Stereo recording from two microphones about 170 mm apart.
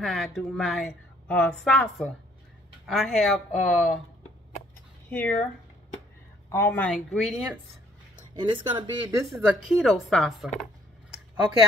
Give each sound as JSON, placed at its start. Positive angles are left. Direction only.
{"t": 0.0, "sound": "a woman's voice", "side_deg": 0}
{"t": 5.1, "sound": "speech", "side_deg": 10}
{"t": 6.5, "sound": "a woman's voice", "side_deg": 15}
{"t": 8.4, "sound": "speech", "side_deg": -30}
{"t": 9.4, "sound": "a woman's voice", "side_deg": -5}